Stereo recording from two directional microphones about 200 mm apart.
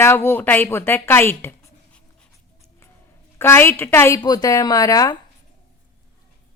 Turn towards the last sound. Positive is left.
turn(degrees=15)  # may be behind; listen again after turning